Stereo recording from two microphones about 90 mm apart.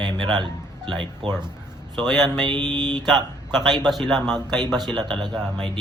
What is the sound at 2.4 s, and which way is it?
Speech, 50° right (ahead or behind).